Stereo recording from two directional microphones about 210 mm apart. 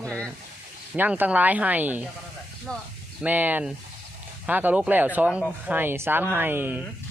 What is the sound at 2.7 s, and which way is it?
Speech, 5° left (ahead or behind).